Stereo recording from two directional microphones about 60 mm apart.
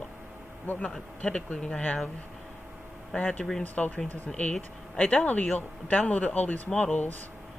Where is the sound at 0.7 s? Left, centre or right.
Left.